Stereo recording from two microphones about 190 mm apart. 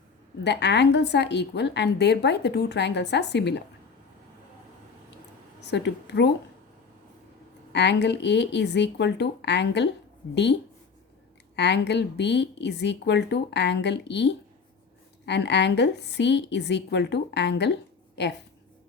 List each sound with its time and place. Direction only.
0.4 s a woman's voice: 65° left (ahead or behind)
5.7 s a woman's voice: 65° left (ahead or behind)
7.7 s a woman's voice: 65° left (ahead or behind)
11.5 s a woman's voice: 65° left (ahead or behind)
15.3 s a woman's voice: 65° left (ahead or behind)